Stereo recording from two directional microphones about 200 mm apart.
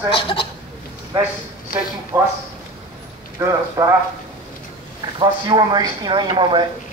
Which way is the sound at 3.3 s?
15° right (ahead or behind).